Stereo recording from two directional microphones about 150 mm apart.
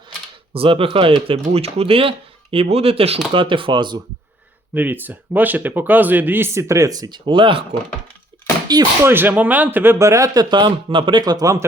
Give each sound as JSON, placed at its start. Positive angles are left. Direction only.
{"t": 0.5, "sound": "speech", "side_deg": -40}
{"t": 4.7, "sound": "speech", "side_deg": -10}
{"t": 9.0, "sound": "speech", "side_deg": -15}